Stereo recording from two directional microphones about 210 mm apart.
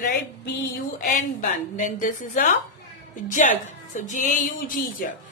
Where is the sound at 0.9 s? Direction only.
40° left (ahead or behind).